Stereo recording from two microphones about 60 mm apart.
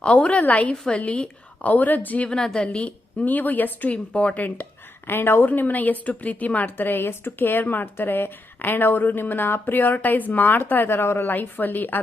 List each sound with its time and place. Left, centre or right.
0.0 s a woman's voice: centre
2.3 s a woman's voice: centre
2.6 s a woman's voice: left
5.0 s a woman's voice: left